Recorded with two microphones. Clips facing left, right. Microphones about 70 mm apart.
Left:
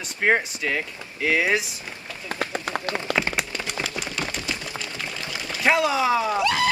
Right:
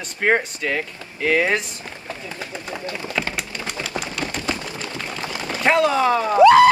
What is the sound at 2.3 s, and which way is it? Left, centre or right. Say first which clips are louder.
Run: left 7 dB; left.